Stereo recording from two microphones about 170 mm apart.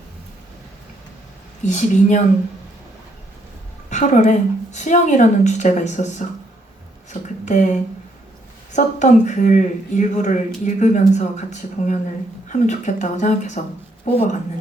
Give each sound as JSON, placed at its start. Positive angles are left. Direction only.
{"t": 1.6, "sound": "speech", "side_deg": 45}
{"t": 3.8, "sound": "speech", "side_deg": 45}
{"t": 12.5, "sound": "speech", "side_deg": 45}